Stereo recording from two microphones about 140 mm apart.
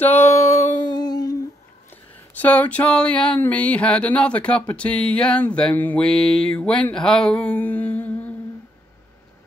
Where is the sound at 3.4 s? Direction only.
10° left (ahead or behind).